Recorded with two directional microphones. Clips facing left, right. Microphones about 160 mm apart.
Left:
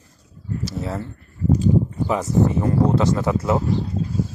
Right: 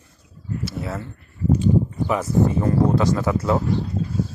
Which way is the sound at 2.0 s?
25° left (ahead or behind).